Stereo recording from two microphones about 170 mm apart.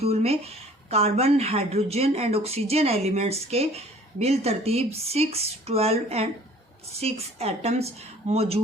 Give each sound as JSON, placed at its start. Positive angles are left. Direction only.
{"t": 0.0, "sound": "speech", "side_deg": -35}